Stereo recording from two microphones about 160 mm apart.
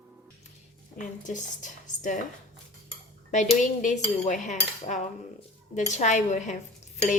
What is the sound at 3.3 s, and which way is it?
Cutlery, 50° left (ahead or behind).